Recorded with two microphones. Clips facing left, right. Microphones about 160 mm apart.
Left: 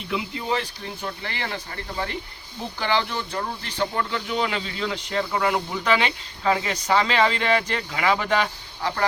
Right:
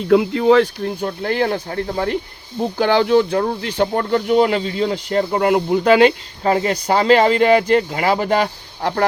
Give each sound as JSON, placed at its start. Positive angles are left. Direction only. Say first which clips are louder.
{"t": 0.1, "sound": "speech", "louder": "right 14 dB", "side_deg": -80}
{"t": 3.6, "sound": "speech", "louder": "right 7 dB", "side_deg": -60}
{"t": 8.8, "sound": "speech", "louder": "right 7 dB", "side_deg": -55}